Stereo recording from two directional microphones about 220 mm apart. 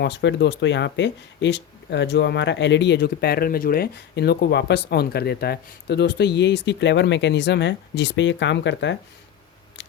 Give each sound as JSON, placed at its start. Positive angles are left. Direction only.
{"t": 0.0, "sound": "speech", "side_deg": 50}